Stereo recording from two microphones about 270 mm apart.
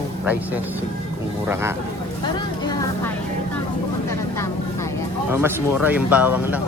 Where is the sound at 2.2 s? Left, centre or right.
Centre.